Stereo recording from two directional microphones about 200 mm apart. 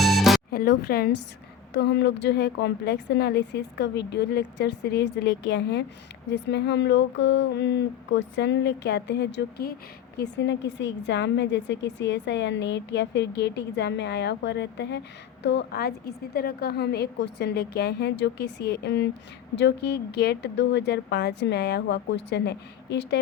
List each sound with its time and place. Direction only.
0.0 s music: centre (ahead or behind)
0.5 s a woman's voice: 50° left (ahead or behind)